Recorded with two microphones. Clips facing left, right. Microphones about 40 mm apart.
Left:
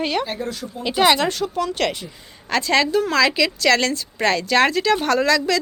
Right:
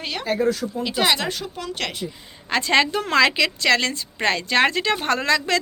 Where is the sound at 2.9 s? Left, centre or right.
Right.